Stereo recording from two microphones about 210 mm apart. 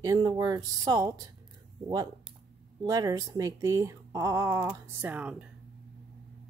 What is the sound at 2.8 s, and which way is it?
Speech, 15° right (ahead or behind).